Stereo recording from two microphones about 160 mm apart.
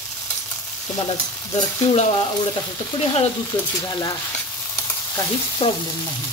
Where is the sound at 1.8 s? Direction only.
35° left (ahead or behind).